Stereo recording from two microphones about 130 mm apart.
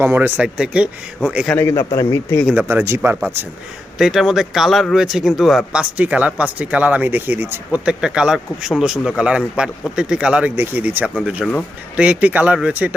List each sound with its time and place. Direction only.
0.0 s speech: 15° right (ahead or behind)
1.5 s a man's voice: 20° left (ahead or behind)
2.6 s speech: 15° right (ahead or behind)
3.9 s speech: 5° right (ahead or behind)